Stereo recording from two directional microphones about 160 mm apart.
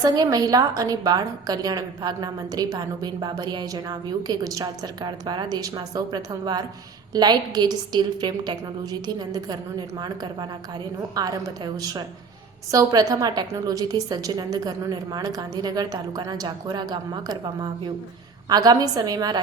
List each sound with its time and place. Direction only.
0.0 s a woman's voice: 25° right (ahead or behind)
11.1 s a woman's voice: 25° right (ahead or behind)